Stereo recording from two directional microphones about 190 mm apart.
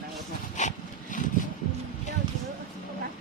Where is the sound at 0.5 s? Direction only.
40° left (ahead or behind).